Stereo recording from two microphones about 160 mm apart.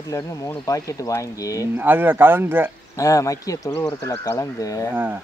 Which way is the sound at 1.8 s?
15° right (ahead or behind).